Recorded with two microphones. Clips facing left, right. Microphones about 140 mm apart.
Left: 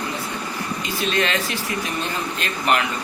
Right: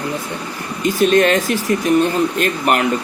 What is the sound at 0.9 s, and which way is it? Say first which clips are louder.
Speech: right 10 dB; 45° right (ahead or behind).